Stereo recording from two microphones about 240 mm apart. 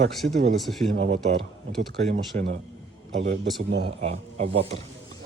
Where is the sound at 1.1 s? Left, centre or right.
Right.